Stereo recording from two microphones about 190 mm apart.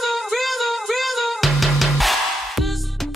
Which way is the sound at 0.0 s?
Centre (ahead or behind).